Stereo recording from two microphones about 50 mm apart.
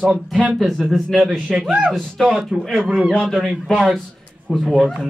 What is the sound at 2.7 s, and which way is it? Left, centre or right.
A man's voice, centre.